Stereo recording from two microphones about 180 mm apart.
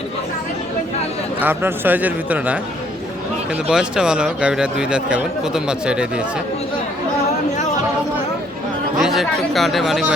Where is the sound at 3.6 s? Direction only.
5° right (ahead or behind).